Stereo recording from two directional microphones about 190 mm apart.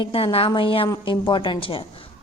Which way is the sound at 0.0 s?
30° left (ahead or behind).